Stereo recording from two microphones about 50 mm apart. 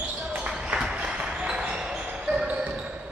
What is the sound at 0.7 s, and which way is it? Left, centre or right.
Basketball bounce, centre.